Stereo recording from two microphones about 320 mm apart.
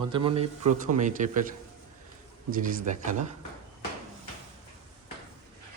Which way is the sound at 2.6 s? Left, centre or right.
Right.